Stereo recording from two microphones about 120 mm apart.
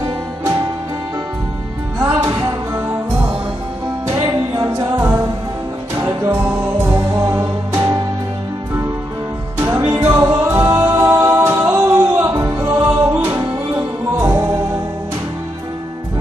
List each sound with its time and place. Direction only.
2.0 s music: 20° right (ahead or behind)
9.6 s music: 25° right (ahead or behind)